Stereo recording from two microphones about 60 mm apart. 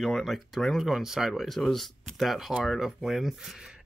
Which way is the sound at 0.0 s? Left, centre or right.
Centre.